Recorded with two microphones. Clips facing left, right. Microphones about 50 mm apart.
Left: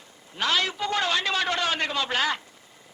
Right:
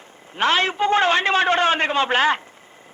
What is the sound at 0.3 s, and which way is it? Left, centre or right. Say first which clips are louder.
A man's voice: right 7 dB; right.